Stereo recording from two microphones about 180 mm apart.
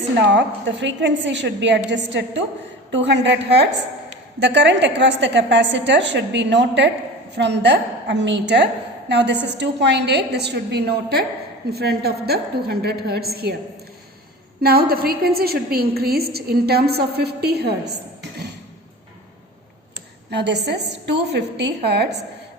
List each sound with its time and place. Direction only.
0.2 s a woman's voice: 80° right; by 13.5 s 60° right (ahead or behind)
14.6 s a woman's voice: 60° right (ahead or behind)
20.3 s a woman's voice: 70° right (ahead or behind)